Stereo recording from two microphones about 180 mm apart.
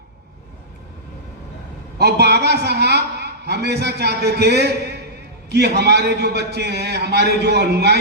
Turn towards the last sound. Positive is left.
turn(degrees=-65)  # may be behind; listen again after turning